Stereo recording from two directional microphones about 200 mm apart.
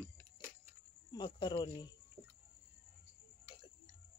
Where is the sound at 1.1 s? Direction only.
20° left (ahead or behind).